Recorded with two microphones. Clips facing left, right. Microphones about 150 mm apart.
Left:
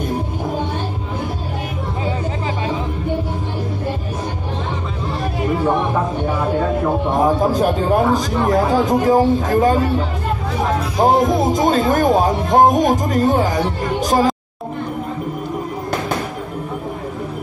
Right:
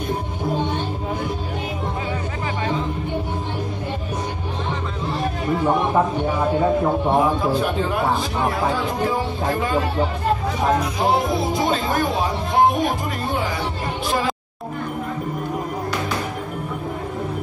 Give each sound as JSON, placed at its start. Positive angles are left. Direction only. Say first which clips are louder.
{"t": 7.2, "sound": "a man's voice", "louder": "left 3 dB", "side_deg": 40}
{"t": 11.0, "sound": "speech", "louder": "left 6 dB", "side_deg": 45}